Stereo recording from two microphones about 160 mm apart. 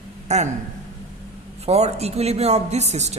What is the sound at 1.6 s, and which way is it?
A woman's voice, 40° right (ahead or behind).